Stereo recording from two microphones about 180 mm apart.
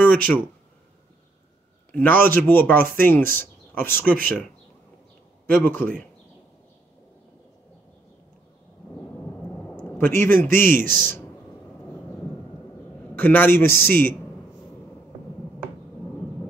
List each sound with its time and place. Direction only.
0.0 s speech: 10° left (ahead or behind)
1.9 s speech: 10° left (ahead or behind)
5.8 s speech: 55° right (ahead or behind)
9.8 s a man's voice: 10° left (ahead or behind)
10.8 s a man's voice: 50° right (ahead or behind)
13.1 s speech: 10° left (ahead or behind)